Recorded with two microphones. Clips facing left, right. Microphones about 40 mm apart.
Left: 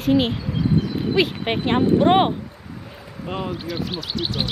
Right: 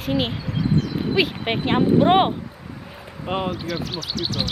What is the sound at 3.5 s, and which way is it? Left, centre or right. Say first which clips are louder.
Speech: even; centre.